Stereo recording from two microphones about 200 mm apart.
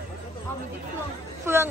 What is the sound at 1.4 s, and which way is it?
Speech, 10° right (ahead or behind).